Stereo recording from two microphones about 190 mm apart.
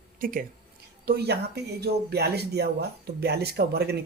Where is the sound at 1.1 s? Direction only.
60° right (ahead or behind).